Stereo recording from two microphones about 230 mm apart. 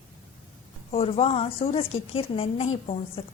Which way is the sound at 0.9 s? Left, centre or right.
Left.